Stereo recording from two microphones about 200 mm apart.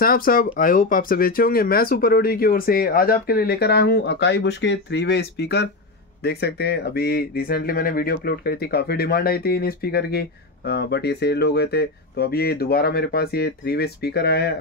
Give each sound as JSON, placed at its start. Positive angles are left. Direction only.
{"t": 0.0, "sound": "speech", "side_deg": 45}